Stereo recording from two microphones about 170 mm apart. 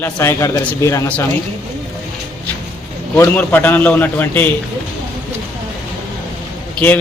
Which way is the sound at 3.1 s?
10° left (ahead or behind).